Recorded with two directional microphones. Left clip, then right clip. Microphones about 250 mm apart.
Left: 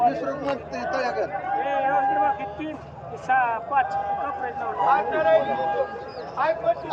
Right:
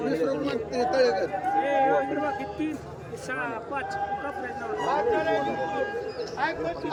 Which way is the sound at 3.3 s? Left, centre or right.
Centre.